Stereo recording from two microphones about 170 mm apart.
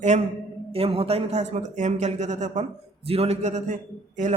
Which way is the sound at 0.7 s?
35° right (ahead or behind).